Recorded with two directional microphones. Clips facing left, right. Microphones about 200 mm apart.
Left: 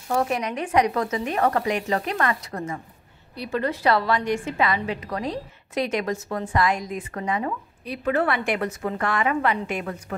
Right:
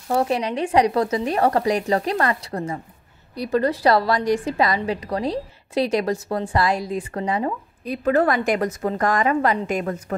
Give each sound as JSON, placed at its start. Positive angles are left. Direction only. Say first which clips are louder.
{"t": 0.1, "sound": "a woman's voice", "louder": "right 3 dB", "side_deg": -30}